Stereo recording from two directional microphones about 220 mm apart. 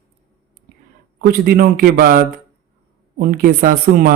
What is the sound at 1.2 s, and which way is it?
Speech, 40° right (ahead or behind).